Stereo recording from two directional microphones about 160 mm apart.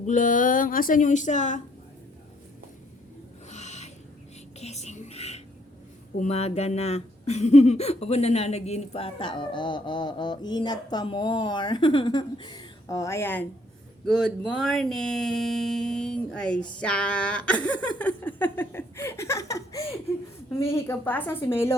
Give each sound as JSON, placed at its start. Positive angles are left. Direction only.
{"t": 0.0, "sound": "a woman's voice", "side_deg": 50}
{"t": 3.5, "sound": "owl", "side_deg": 45}
{"t": 4.6, "sound": "whispering", "side_deg": 45}
{"t": 6.1, "sound": "speech", "side_deg": 40}
{"t": 14.0, "sound": "speech", "side_deg": 0}